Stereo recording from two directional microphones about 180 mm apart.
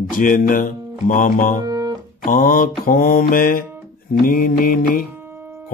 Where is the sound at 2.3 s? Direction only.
50° left (ahead or behind).